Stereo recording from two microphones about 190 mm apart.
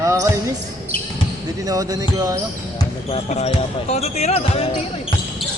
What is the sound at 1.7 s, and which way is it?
Speech, 20° right (ahead or behind).